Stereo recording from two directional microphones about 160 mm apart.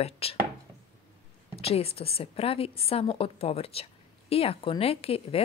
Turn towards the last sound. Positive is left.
turn(degrees=40)  # may be behind; listen again after turning